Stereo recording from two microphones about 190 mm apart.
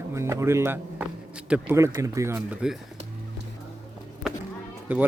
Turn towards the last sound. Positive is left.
turn(degrees=-10)  # may be behind; listen again after turning